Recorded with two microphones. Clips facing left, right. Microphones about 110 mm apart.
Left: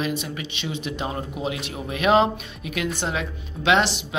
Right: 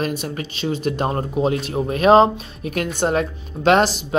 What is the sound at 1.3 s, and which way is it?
Speech, 40° right (ahead or behind).